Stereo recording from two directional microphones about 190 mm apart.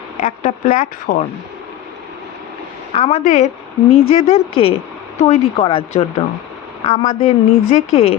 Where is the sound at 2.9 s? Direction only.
30° left (ahead or behind).